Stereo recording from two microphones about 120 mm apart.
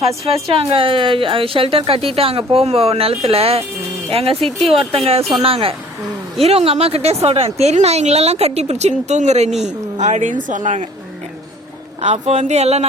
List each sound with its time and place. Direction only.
0.4 s a woman's voice: 50° right (ahead or behind); by 9.5 s 70° right (ahead or behind)
9.6 s a woman's voice: 80° right
12.0 s speech: 70° right (ahead or behind)